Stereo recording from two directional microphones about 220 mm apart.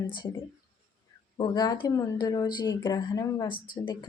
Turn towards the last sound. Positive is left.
turn(degrees=40)  # may be behind; listen again after turning